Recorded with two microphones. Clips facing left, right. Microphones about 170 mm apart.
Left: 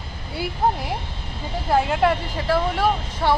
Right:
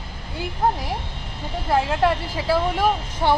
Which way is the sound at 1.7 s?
Centre (ahead or behind).